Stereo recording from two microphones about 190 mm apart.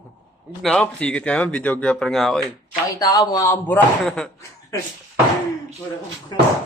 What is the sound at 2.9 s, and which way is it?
A man's voice, 20° left (ahead or behind).